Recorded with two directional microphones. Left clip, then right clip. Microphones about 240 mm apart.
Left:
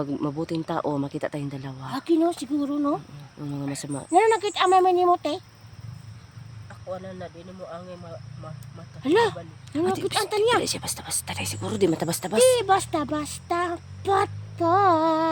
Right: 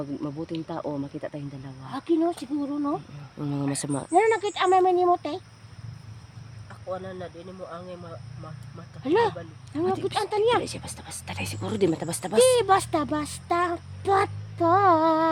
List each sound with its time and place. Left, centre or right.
0.0 s speech: left
1.9 s speech: left
3.4 s speech: centre
4.1 s speech: left
6.9 s speech: centre
9.0 s speech: left
10.6 s speech: centre
11.9 s speech: centre